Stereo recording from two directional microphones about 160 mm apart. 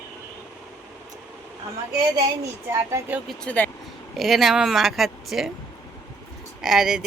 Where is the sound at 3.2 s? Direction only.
5° left (ahead or behind).